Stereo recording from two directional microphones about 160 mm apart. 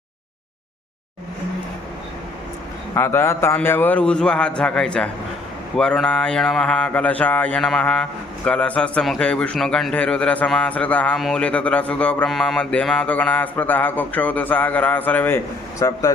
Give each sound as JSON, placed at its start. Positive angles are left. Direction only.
{"t": 2.9, "sound": "a man's voice", "side_deg": 15}
{"t": 5.7, "sound": "mantra", "side_deg": 5}
{"t": 8.4, "sound": "a man's voice", "side_deg": 10}